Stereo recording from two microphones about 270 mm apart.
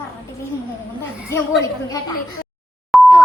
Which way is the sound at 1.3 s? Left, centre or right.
Centre.